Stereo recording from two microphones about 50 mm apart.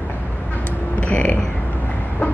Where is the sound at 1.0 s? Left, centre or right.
Left.